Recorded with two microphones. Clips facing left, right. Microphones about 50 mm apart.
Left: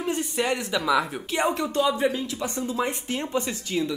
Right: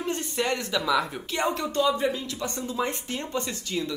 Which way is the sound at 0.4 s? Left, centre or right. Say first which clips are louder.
Even; centre.